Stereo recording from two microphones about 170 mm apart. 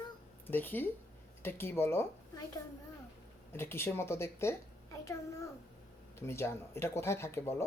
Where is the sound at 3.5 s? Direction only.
15° left (ahead or behind).